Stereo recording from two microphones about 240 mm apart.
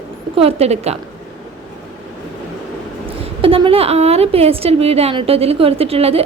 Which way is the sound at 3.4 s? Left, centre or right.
Right.